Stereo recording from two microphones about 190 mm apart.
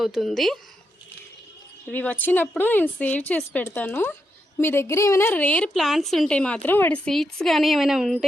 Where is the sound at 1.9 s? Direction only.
10° left (ahead or behind).